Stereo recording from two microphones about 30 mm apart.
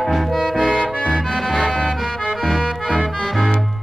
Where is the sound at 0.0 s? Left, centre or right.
Centre.